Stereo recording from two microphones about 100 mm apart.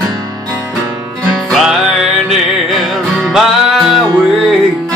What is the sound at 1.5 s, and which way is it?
Music, centre (ahead or behind).